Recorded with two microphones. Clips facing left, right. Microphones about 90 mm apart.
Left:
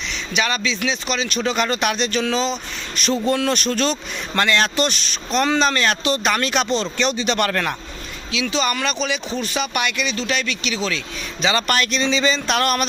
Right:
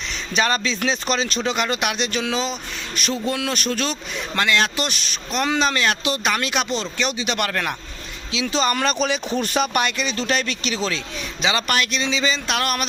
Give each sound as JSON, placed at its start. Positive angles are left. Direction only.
{"t": 0.3, "sound": "speech", "side_deg": -35}
{"t": 1.4, "sound": "speech", "side_deg": -15}
{"t": 8.4, "sound": "speech", "side_deg": -40}
{"t": 11.4, "sound": "speech", "side_deg": -10}